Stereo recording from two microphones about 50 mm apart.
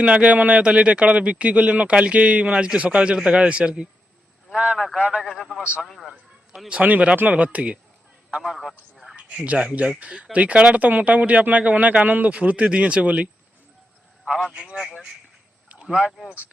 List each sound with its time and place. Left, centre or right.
0.0 s a man's voice: right
5.8 s speech: centre
6.8 s a man's voice: right
8.4 s speech: centre
9.1 s a sound: right
9.6 s a man's voice: right
14.3 s a man's voice: centre